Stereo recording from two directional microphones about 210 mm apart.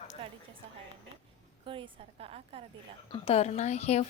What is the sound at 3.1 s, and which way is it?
Speech, 25° left (ahead or behind).